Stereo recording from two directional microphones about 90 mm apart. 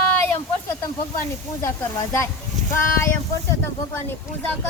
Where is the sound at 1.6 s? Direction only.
30° left (ahead or behind).